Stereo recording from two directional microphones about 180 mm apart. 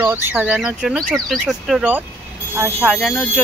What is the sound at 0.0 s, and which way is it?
A woman's voice, 10° right (ahead or behind).